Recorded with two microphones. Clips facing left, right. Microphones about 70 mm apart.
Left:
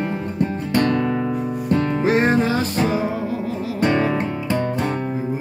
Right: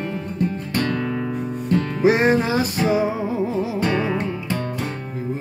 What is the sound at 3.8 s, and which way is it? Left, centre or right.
Music, left.